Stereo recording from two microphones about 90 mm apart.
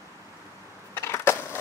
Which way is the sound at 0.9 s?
30° left (ahead or behind).